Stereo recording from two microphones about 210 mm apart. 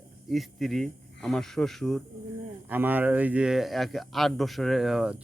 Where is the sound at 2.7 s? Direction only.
10° right (ahead or behind).